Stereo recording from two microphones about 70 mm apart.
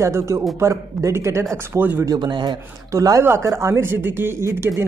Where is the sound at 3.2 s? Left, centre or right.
Right.